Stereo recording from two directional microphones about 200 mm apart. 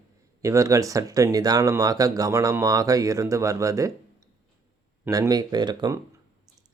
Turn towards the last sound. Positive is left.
turn(degrees=-20)  # may be behind; listen again after turning